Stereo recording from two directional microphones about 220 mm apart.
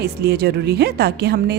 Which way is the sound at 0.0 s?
45° right (ahead or behind).